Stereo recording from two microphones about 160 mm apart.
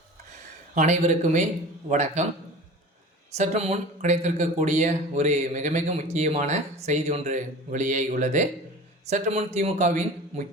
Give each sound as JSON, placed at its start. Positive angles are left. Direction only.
{"t": 0.8, "sound": "speech", "side_deg": -50}
{"t": 3.3, "sound": "speech", "side_deg": -45}